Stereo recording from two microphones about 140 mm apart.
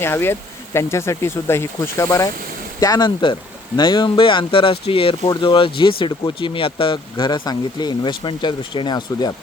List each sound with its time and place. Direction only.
0.0 s speech: 15° left (ahead or behind)